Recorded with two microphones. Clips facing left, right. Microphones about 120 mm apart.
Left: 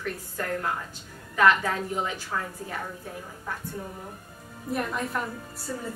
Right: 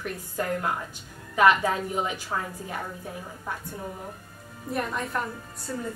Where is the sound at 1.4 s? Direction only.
15° right (ahead or behind).